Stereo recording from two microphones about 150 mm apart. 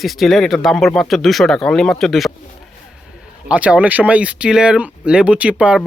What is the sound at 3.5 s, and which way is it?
Speech, 10° right (ahead or behind).